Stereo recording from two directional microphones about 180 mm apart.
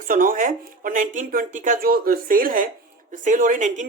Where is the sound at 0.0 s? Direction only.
50° right (ahead or behind).